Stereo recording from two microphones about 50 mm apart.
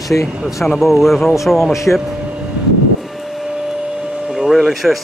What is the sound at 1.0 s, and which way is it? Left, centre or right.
Speech, centre.